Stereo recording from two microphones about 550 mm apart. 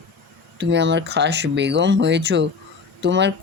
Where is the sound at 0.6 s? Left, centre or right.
Centre.